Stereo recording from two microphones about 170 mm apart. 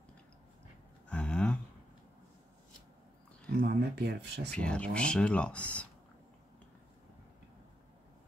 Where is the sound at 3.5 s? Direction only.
70° right (ahead or behind).